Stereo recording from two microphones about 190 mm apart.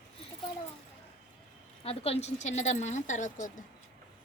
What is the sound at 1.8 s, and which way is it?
A woman's voice, 30° left (ahead or behind).